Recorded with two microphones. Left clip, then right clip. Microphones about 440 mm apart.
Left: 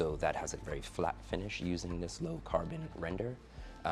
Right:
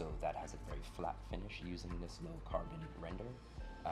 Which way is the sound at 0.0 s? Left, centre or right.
Left.